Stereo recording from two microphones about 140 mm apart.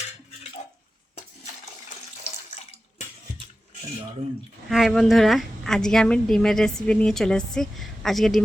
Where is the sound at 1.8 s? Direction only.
50° left (ahead or behind).